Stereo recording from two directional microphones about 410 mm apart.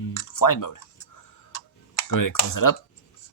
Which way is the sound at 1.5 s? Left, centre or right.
Left.